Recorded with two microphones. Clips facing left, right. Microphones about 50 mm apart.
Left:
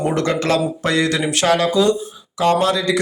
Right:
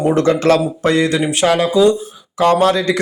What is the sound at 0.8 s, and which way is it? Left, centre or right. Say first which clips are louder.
Speech: right 5 dB; right.